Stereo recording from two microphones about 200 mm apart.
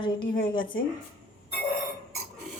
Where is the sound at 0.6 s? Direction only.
45° left (ahead or behind).